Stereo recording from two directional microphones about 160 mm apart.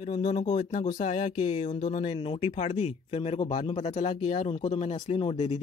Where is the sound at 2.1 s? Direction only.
30° left (ahead or behind).